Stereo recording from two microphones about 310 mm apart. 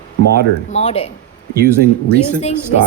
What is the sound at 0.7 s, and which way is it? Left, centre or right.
Speech, left.